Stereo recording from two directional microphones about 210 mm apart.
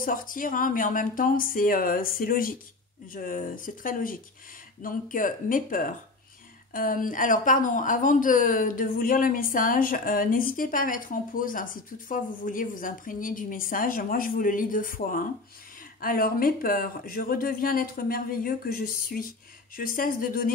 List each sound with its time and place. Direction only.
0.0 s speech: 40° left (ahead or behind)